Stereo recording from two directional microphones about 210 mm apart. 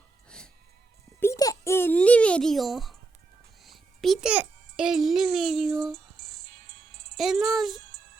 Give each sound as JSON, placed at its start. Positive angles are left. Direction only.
{"t": 0.3, "sound": "music", "side_deg": 5}
{"t": 1.2, "sound": "a sound", "side_deg": 15}
{"t": 3.6, "sound": "a child's voice", "side_deg": 0}
{"t": 7.2, "sound": "a child's voice", "side_deg": 0}